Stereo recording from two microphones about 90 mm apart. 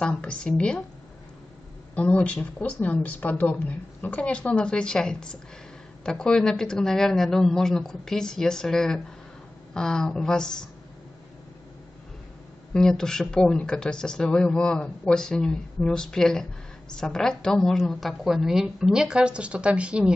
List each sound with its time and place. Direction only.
0.0 s speech: 10° left (ahead or behind)
2.0 s speech: 15° left (ahead or behind)
12.7 s a woman's voice: 5° left (ahead or behind); by 20.1 s 10° right (ahead or behind)